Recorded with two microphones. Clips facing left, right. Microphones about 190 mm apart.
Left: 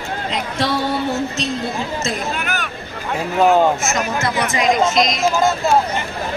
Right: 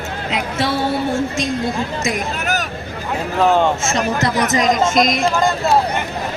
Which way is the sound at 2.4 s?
40° right (ahead or behind).